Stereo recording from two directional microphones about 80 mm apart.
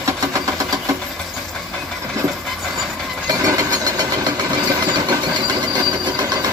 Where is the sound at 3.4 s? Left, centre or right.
Right.